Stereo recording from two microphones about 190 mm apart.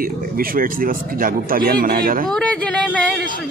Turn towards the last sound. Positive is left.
turn(degrees=5)  # may be behind; listen again after turning